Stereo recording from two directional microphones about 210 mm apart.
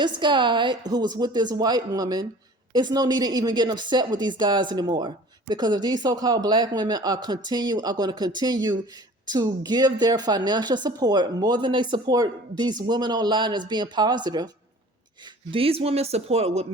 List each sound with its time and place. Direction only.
0.0 s a woman's voice: 20° right (ahead or behind)